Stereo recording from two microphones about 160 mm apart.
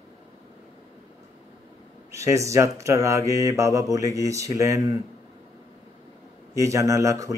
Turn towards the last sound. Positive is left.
turn(degrees=-20)  # may be behind; listen again after turning